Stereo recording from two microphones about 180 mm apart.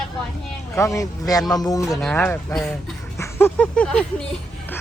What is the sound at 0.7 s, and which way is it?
Speech, 15° left (ahead or behind).